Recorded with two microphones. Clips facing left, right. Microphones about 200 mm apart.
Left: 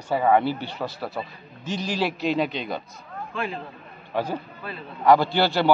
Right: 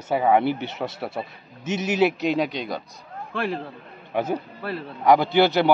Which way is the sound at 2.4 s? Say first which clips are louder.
Right 1 dB; 10° right (ahead or behind).